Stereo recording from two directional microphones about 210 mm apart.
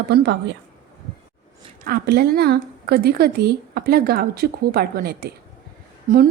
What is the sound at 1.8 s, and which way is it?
Speech, 50° right (ahead or behind).